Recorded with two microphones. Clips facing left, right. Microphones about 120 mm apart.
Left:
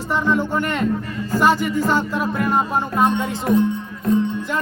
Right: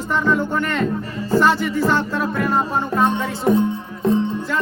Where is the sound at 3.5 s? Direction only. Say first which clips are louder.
Right 1 dB; 20° right (ahead or behind).